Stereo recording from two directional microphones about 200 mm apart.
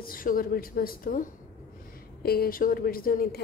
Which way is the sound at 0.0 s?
45° left (ahead or behind).